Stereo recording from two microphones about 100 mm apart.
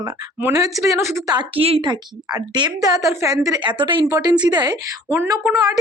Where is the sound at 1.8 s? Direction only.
45° right (ahead or behind).